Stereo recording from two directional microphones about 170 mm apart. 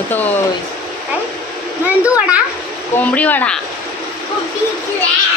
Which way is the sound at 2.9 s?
10° left (ahead or behind).